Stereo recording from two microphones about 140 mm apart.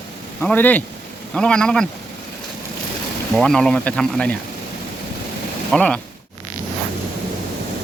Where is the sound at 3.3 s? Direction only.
5° left (ahead or behind).